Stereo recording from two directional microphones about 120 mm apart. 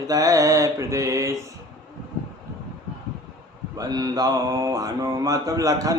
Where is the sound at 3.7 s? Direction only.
30° right (ahead or behind).